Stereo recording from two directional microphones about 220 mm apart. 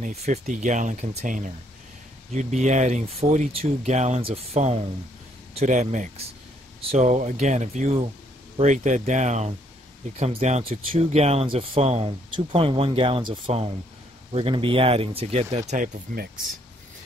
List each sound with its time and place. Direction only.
0.0 s speech: 30° right (ahead or behind)